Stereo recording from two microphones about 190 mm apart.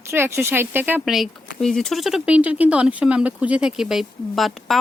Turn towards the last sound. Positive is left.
turn(degrees=0)  # may be behind; listen again after turning